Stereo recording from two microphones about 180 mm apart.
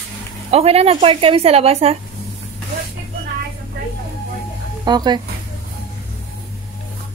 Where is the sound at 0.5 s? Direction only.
35° right (ahead or behind).